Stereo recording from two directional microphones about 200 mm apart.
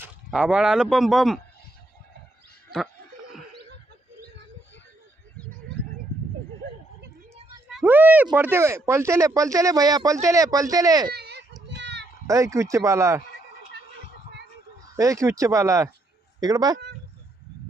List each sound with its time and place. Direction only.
0.3 s speech: 5° right (ahead or behind)
7.7 s speech: 5° right (ahead or behind)
11.1 s children playing: 55° right (ahead or behind)
12.3 s speech: 15° right (ahead or behind)
14.9 s speech: 15° right (ahead or behind)